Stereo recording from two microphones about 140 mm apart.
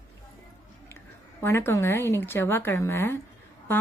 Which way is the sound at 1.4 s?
15° left (ahead or behind).